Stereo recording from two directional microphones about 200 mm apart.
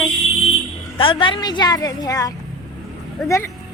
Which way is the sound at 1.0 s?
25° left (ahead or behind).